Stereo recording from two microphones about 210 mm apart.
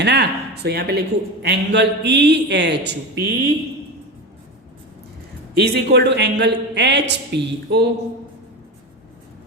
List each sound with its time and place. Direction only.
0.0 s speech: 55° right (ahead or behind)
5.5 s a man's voice: 50° right (ahead or behind)